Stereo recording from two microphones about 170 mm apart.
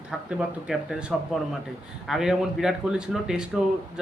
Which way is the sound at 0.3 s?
5° right (ahead or behind).